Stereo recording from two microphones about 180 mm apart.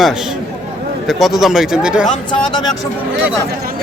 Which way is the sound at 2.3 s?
25° left (ahead or behind).